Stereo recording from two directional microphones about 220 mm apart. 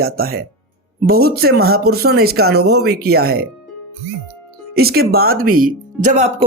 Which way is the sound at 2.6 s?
90° right.